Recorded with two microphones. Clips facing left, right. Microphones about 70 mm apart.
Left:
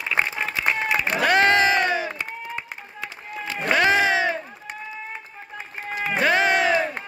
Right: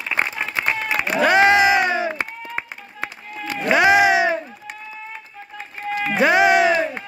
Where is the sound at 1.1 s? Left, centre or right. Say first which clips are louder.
Right 4 dB; centre.